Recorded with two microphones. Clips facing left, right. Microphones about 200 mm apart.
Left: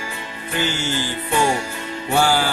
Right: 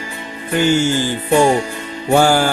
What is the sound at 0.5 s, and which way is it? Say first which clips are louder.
Speech: right 9 dB; 50° right (ahead or behind).